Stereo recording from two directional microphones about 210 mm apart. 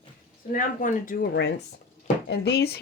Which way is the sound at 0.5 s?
40° left (ahead or behind).